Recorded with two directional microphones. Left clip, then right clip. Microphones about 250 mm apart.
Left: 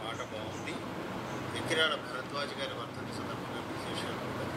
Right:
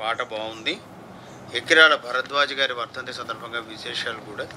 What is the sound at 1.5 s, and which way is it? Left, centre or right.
Speech, right.